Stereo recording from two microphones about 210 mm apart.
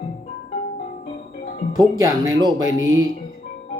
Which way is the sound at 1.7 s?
15° right (ahead or behind).